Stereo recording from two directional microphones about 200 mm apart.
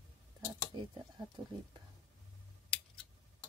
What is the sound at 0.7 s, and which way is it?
Speech, 20° right (ahead or behind).